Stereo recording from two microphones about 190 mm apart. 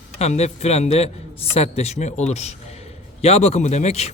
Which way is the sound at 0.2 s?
35° left (ahead or behind).